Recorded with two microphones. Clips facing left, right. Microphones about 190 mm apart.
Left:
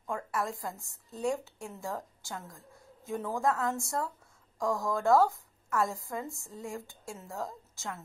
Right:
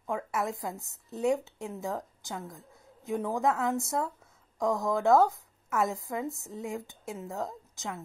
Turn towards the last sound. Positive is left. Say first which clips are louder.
# right 3 dB
turn(degrees=-20)  # may be behind; listen again after turning